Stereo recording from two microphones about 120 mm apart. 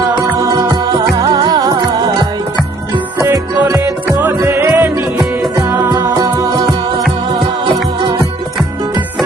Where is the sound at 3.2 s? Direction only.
25° right (ahead or behind).